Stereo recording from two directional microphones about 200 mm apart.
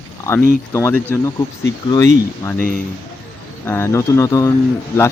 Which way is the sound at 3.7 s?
15° left (ahead or behind).